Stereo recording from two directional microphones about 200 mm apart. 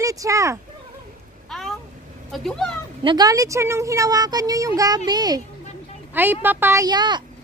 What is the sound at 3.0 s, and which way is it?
Speech, 20° right (ahead or behind).